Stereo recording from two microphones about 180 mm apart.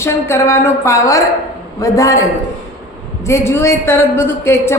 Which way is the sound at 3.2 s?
15° left (ahead or behind).